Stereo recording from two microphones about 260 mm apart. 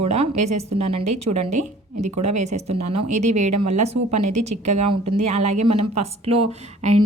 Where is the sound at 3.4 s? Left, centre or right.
Right.